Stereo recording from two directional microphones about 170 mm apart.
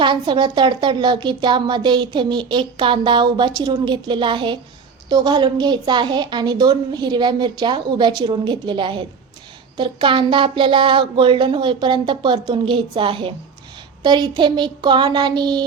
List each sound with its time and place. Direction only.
0.0 s a woman's voice: 30° right (ahead or behind)